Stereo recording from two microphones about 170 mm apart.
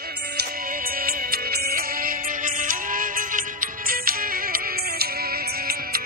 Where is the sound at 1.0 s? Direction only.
60° right (ahead or behind).